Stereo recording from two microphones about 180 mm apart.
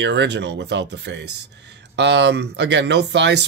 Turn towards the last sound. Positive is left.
turn(degrees=-75)  # may be behind; listen again after turning